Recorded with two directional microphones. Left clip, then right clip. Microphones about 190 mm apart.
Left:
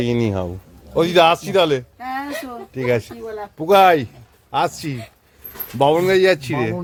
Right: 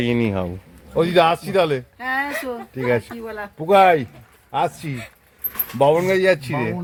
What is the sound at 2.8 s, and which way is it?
Speech, 10° left (ahead or behind).